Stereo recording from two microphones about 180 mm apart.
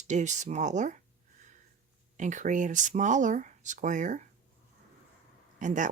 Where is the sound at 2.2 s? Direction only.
45° right (ahead or behind).